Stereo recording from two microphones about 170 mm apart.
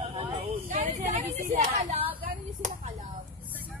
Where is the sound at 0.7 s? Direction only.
50° right (ahead or behind).